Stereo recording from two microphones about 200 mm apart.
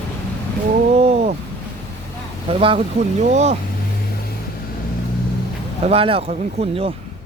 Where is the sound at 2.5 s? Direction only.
30° right (ahead or behind).